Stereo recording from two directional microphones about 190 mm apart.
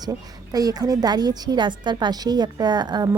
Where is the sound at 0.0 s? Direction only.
20° right (ahead or behind).